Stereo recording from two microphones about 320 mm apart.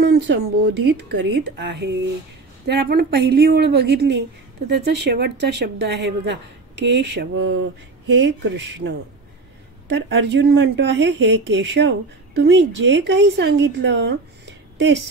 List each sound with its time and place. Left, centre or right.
0.0 s speech: right
9.9 s speech: right